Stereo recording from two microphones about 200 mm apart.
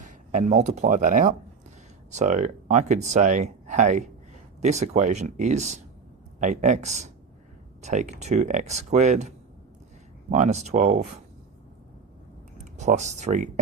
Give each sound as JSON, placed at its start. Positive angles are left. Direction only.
{"t": 0.0, "sound": "speech", "side_deg": -35}
{"t": 12.5, "sound": "speech", "side_deg": -35}